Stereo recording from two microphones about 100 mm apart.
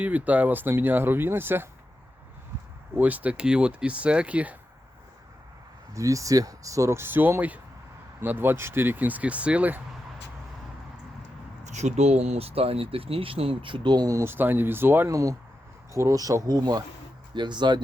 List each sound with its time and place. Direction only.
0.0 s speech: 15° right (ahead or behind)
2.9 s speech: 15° right (ahead or behind)
5.9 s speech: 30° right (ahead or behind); by 9.8 s 15° right (ahead or behind)
11.9 s speech: 90° right; by 14.2 s 45° right (ahead or behind)
14.2 s speech: 20° right (ahead or behind); by 17.8 s 50° right (ahead or behind)